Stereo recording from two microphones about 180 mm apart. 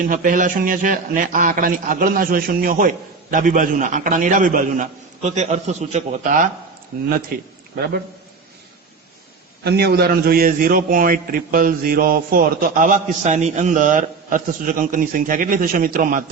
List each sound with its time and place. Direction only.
0.0 s a man's voice: 50° right (ahead or behind)
9.6 s a man's voice: 65° right (ahead or behind)